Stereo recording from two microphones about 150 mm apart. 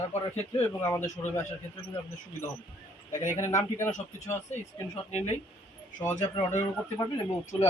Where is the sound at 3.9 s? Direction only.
50° left (ahead or behind).